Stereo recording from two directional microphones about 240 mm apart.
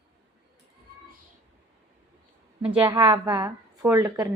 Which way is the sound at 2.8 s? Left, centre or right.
Centre.